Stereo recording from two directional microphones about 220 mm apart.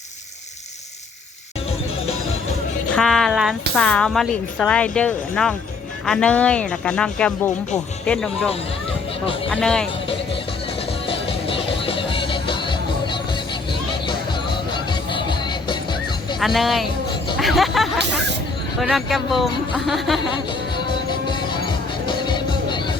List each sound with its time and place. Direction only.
2.9 s music: centre (ahead or behind)
3.8 s speech: 5° left (ahead or behind)
9.5 s speech: 5° left (ahead or behind)
11.0 s music: 25° left (ahead or behind)
16.4 s speech: centre (ahead or behind)
17.4 s hubbub: centre (ahead or behind)
18.8 s speech: centre (ahead or behind)
20.8 s music: 20° left (ahead or behind)